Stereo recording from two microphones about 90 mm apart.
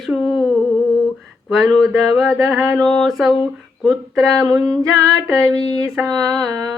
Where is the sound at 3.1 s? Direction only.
5° right (ahead or behind).